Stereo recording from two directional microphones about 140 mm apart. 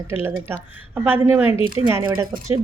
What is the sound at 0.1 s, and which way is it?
Speech, 15° right (ahead or behind).